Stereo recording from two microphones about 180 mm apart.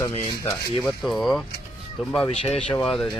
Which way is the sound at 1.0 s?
Centre (ahead or behind).